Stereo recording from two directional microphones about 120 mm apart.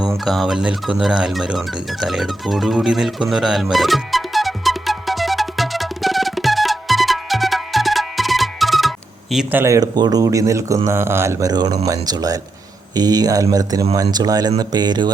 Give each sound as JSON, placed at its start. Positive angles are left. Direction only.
{"t": 0.3, "sound": "music", "side_deg": 0}
{"t": 9.5, "sound": "speech", "side_deg": -20}